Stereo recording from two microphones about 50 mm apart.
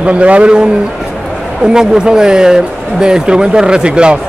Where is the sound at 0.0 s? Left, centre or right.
Right.